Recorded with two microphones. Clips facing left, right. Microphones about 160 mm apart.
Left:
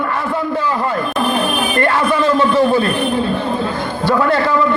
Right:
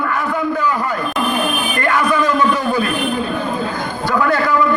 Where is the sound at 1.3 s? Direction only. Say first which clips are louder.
Left 2 dB; 30° left (ahead or behind).